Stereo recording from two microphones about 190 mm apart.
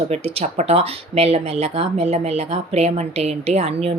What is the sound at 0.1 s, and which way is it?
Speech, 35° right (ahead or behind).